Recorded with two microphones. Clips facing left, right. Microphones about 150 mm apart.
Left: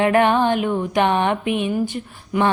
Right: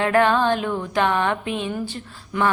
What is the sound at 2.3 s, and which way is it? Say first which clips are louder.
Speech: left 3 dB; 15° left (ahead or behind).